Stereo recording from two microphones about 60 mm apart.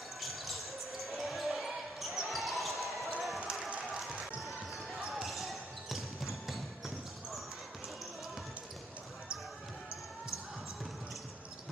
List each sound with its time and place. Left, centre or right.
0.2 s basketball bounce: centre